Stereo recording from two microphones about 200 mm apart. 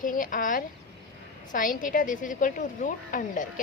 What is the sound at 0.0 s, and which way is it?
A woman's voice, 45° left (ahead or behind).